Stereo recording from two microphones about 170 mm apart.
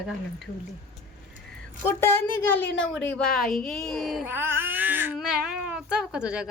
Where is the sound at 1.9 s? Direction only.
15° left (ahead or behind); by 4.3 s centre (ahead or behind).